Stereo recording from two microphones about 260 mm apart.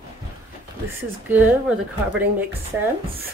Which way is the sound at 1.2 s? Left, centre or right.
Centre.